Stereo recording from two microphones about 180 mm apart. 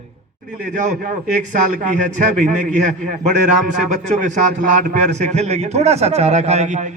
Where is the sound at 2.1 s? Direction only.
45° right (ahead or behind).